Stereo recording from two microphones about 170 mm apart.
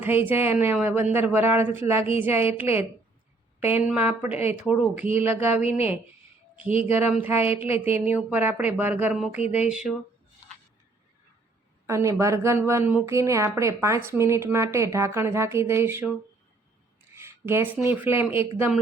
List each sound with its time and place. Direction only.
0.5 s a woman's voice: 10° right (ahead or behind)
3.6 s speech: 40° left (ahead or behind)
3.8 s a woman's voice: 10° right (ahead or behind)
6.7 s speech: 35° left (ahead or behind)
6.9 s a woman's voice: 10° right (ahead or behind)
7.3 s speech: 35° left (ahead or behind)
7.9 s a woman's voice: 10° right (ahead or behind)
11.9 s a woman's voice: 15° right (ahead or behind)
17.2 s a woman's voice: 15° right (ahead or behind)